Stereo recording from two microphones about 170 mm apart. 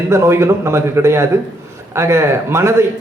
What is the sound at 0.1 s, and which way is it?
A man's voice, 15° right (ahead or behind).